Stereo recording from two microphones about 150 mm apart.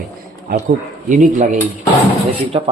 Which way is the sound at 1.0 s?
60° right (ahead or behind).